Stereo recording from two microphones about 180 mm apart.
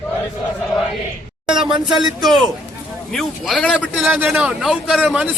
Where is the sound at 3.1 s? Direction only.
Centre (ahead or behind).